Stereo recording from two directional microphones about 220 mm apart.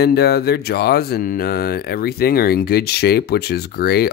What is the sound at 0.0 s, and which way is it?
Speech, 45° left (ahead or behind).